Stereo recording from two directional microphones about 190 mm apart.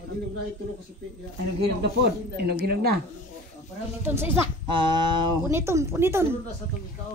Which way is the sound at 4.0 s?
15° right (ahead or behind).